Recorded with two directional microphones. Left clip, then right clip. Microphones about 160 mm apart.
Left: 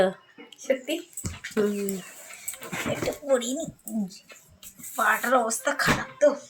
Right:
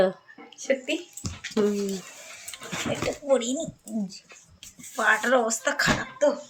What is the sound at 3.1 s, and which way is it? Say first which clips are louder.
Speech: right 2 dB; centre (ahead or behind).